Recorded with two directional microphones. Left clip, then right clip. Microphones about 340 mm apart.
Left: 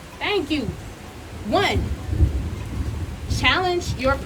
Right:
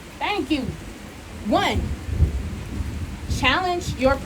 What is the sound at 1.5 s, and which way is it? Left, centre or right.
Speech, centre.